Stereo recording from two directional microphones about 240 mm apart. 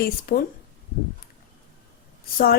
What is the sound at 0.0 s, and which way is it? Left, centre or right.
Speech, left.